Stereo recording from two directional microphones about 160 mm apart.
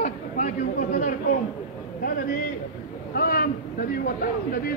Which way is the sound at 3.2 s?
70° left (ahead or behind).